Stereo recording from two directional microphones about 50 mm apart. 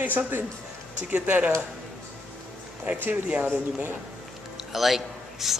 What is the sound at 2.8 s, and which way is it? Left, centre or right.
Speech, right.